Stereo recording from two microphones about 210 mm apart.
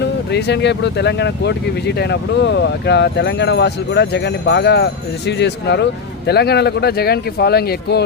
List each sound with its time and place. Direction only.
0.0 s speech: 55° left (ahead or behind)